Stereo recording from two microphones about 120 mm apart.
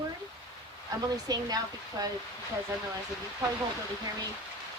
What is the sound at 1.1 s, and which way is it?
Speech, 30° right (ahead or behind).